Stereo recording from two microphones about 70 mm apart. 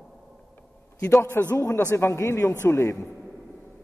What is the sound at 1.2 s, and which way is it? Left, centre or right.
Speech, left.